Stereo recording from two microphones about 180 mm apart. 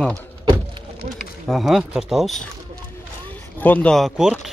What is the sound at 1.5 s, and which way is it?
Speech, centre (ahead or behind).